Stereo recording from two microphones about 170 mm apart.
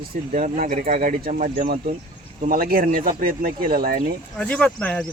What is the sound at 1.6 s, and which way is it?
Speech, 60° right (ahead or behind).